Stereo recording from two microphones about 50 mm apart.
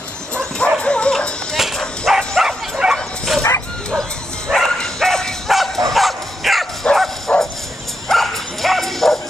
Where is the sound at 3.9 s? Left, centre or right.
Centre.